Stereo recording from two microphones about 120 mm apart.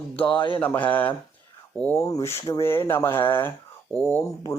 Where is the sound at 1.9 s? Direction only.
25° left (ahead or behind).